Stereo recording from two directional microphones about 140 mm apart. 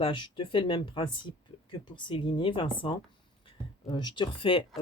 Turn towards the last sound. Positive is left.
turn(degrees=40)  # may be behind; listen again after turning